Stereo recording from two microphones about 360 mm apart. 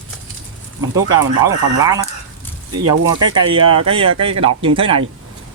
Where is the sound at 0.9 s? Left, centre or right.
Centre.